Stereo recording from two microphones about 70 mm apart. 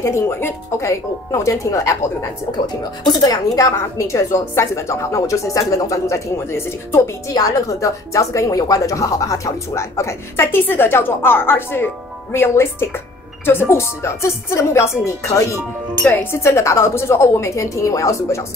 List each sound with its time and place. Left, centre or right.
0.0 s speech: left
2.5 s speech: left
4.0 s speech: left
7.3 s speech: left